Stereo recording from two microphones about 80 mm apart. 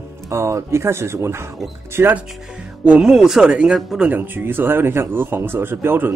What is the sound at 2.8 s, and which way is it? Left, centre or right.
A man's voice, centre.